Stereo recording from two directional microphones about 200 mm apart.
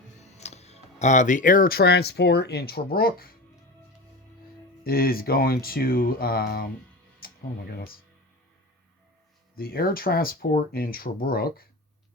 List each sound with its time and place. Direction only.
0.2 s speech: 35° left (ahead or behind); by 3.3 s 50° left (ahead or behind)
4.8 s speech: 50° left (ahead or behind)
7.2 s music: 50° left (ahead or behind)
9.6 s speech: 50° left (ahead or behind)